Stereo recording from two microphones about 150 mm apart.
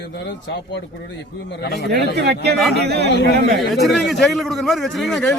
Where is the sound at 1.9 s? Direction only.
90° right.